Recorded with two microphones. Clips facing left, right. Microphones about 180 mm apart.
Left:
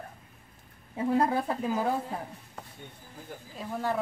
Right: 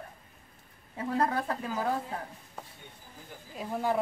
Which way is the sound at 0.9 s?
20° left (ahead or behind).